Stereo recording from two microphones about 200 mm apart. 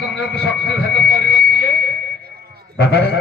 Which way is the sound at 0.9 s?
60° left (ahead or behind).